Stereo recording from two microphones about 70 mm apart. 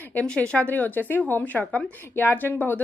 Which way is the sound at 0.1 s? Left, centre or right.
Left.